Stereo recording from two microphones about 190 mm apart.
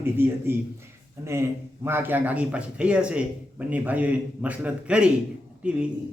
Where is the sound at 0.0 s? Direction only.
10° right (ahead or behind).